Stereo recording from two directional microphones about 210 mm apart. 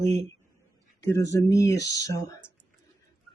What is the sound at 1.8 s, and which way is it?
Speech, 55° left (ahead or behind).